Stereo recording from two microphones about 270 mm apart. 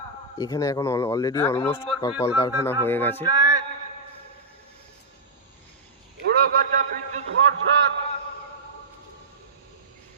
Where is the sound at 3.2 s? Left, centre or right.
Centre.